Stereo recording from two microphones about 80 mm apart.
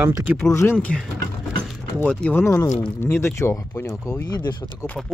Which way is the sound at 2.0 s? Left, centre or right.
Centre.